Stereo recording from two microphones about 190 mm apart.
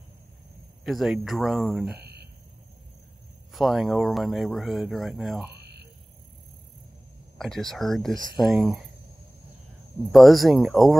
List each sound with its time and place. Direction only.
0.8 s speech: centre (ahead or behind)
2.0 s a sound: 55° right (ahead or behind)
3.5 s speech: centre (ahead or behind)
7.3 s speech: centre (ahead or behind)
10.1 s speech: centre (ahead or behind)